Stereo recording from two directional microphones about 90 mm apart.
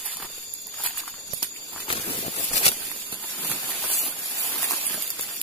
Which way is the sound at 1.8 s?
85° left.